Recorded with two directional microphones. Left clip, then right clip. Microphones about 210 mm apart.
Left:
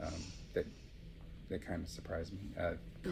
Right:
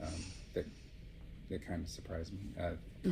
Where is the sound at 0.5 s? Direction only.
20° left (ahead or behind).